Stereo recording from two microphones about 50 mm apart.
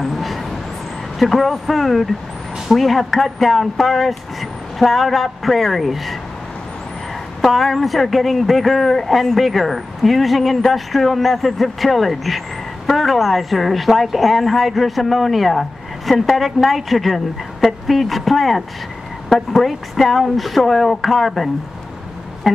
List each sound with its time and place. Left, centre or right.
0.0 s train: centre
1.2 s a man's voice: centre
7.4 s a man's voice: centre